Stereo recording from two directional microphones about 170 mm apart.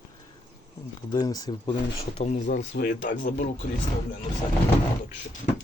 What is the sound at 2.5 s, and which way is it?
Speech, 70° left (ahead or behind).